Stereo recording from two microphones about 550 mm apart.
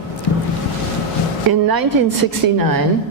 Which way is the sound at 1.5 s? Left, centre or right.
Right.